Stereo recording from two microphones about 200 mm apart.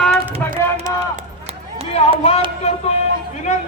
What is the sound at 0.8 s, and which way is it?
Run, 35° right (ahead or behind).